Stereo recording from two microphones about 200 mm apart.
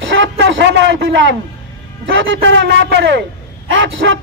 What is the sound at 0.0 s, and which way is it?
A man's voice, 65° right (ahead or behind).